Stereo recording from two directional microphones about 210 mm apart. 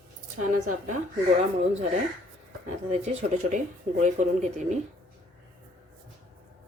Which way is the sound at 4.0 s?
35° right (ahead or behind).